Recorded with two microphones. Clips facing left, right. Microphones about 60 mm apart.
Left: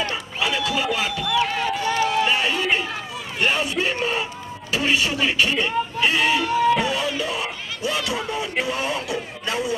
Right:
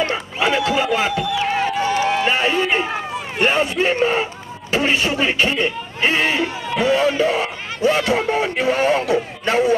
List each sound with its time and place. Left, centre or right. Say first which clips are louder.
0.0 s speech: right 5 dB; right
0.9 s run: right 3 dB; right
3.8 s a man's voice: right 6 dB; right